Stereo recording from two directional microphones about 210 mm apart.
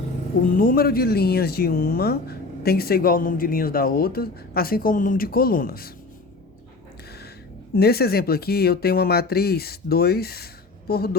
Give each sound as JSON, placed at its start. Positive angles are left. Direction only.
{"t": 0.5, "sound": "speech", "side_deg": 40}
{"t": 7.8, "sound": "speech", "side_deg": 45}